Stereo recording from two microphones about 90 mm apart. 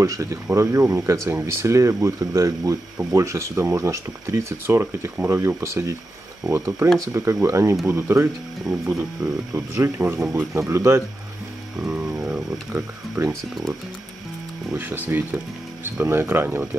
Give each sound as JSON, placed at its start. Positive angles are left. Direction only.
{"t": 0.0, "sound": "speech", "side_deg": -35}
{"t": 11.8, "sound": "a sound", "side_deg": -15}
{"t": 12.2, "sound": "speech", "side_deg": -15}
{"t": 14.7, "sound": "speech", "side_deg": -20}